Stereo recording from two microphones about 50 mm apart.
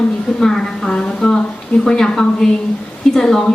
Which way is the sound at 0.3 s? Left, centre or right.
Centre.